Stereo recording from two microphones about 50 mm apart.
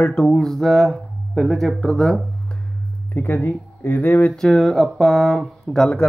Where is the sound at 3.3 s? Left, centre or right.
Left.